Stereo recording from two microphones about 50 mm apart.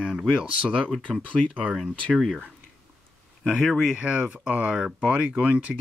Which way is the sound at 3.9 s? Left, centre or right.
Centre.